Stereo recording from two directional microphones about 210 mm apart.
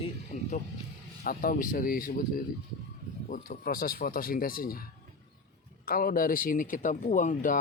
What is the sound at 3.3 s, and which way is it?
Speech, 45° left (ahead or behind).